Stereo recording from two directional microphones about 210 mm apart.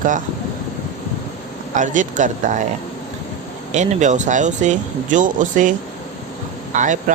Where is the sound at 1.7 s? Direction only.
35° right (ahead or behind).